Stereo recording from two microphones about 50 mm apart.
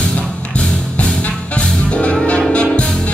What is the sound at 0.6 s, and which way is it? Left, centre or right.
Music, left.